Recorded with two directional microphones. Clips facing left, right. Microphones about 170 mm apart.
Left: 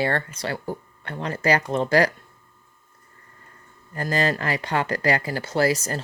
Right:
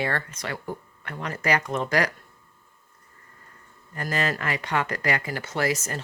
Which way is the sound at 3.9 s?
30° left (ahead or behind).